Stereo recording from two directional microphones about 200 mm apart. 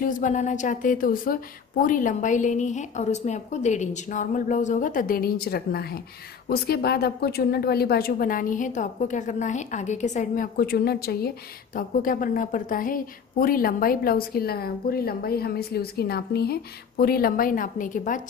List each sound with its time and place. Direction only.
0.0 s a woman's voice: 40° left (ahead or behind)